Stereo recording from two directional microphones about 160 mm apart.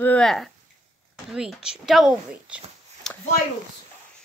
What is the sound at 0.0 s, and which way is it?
Speech, 5° left (ahead or behind).